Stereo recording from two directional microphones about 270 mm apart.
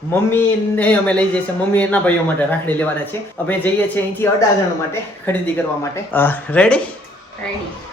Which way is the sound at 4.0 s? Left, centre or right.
Centre.